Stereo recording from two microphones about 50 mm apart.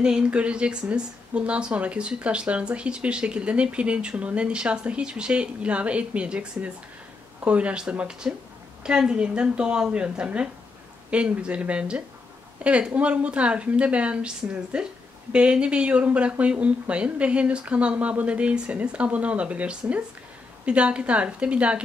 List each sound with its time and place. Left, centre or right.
0.0 s speech: right